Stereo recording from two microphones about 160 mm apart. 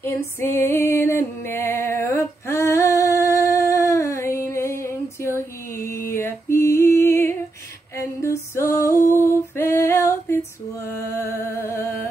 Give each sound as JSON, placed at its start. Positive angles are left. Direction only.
{"t": 0.0, "sound": "music", "side_deg": 15}
{"t": 4.6, "sound": "a sound", "side_deg": 15}
{"t": 8.2, "sound": "music", "side_deg": 15}